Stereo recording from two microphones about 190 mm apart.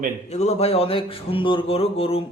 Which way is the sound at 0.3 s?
35° left (ahead or behind).